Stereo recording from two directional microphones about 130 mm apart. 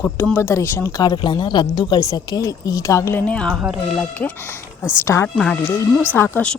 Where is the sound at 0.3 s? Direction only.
20° left (ahead or behind).